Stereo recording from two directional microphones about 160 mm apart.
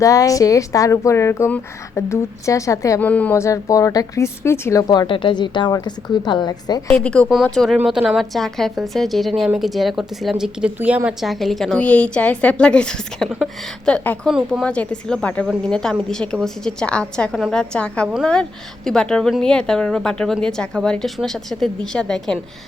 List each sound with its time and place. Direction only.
0.0 s speech: 20° left (ahead or behind)
6.9 s a woman's voice: 5° left (ahead or behind)